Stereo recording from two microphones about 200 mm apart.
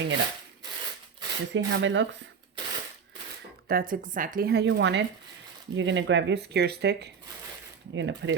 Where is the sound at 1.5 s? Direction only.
65° right (ahead or behind).